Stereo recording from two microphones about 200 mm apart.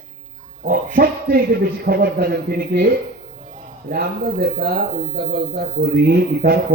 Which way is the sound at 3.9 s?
50° right (ahead or behind).